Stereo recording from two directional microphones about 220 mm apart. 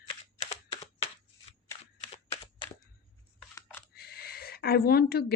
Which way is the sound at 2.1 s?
25° left (ahead or behind).